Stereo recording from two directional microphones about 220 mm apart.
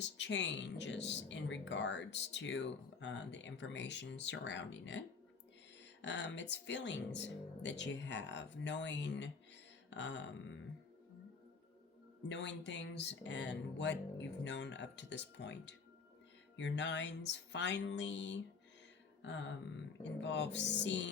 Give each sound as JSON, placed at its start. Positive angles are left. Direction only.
{"t": 0.0, "sound": "speech", "side_deg": 55}
{"t": 9.9, "sound": "music", "side_deg": 55}
{"t": 12.3, "sound": "speech", "side_deg": 55}
{"t": 16.6, "sound": "music", "side_deg": 55}
{"t": 20.2, "sound": "speech", "side_deg": 55}